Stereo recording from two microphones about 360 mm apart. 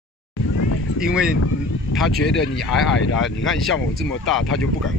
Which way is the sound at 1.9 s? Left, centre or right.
Left.